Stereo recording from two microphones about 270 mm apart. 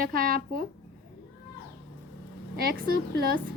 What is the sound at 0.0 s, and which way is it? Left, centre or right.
Speech, right.